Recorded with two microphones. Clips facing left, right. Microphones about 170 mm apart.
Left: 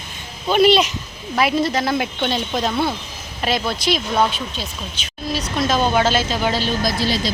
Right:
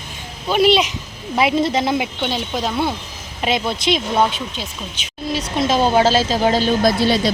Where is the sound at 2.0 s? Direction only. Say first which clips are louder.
Left 1 dB; 10° right (ahead or behind).